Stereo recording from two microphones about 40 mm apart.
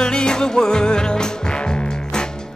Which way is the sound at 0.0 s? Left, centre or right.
Centre.